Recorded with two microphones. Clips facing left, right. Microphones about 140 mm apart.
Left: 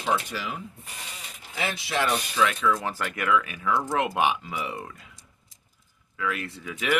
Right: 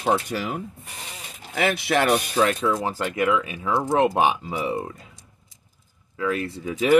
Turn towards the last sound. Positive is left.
turn(degrees=-35)  # may be behind; listen again after turning